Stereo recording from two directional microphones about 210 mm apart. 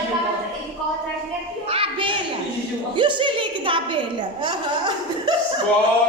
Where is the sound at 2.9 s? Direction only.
25° right (ahead or behind).